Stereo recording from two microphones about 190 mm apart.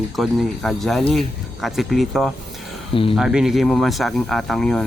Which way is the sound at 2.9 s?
30° left (ahead or behind).